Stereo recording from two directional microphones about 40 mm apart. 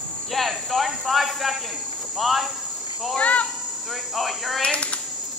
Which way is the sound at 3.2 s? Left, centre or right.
Left.